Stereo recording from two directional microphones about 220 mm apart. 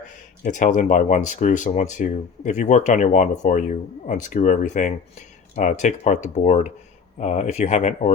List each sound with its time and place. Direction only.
0.4 s speech: 35° left (ahead or behind)